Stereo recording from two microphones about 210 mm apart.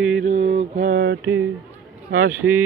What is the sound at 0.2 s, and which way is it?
Mantra, 35° right (ahead or behind).